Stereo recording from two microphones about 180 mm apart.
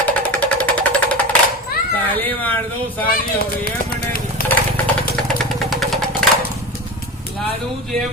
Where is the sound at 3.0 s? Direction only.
55° left (ahead or behind).